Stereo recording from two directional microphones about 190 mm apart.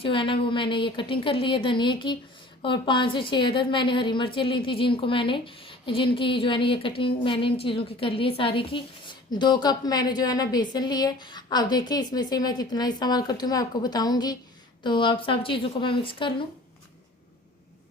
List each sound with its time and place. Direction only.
0.0 s a woman's voice: 25° left (ahead or behind)